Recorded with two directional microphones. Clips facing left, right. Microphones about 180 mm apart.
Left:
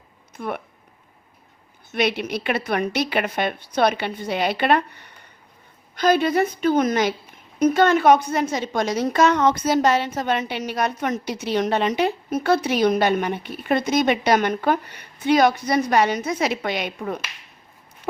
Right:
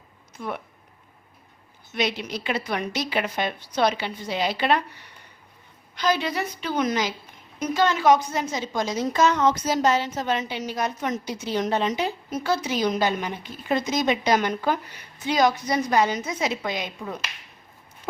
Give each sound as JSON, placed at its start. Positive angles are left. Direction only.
{"t": 0.3, "sound": "speech", "side_deg": 55}
{"t": 1.9, "sound": "a woman's voice", "side_deg": 60}